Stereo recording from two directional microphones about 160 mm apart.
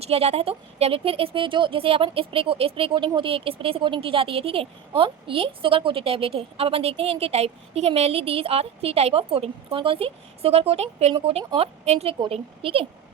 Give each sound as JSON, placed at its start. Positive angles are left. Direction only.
{"t": 0.0, "sound": "speech", "side_deg": -40}